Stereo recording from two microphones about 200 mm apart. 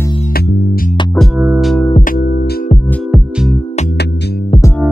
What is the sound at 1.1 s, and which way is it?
Music, 5° right (ahead or behind).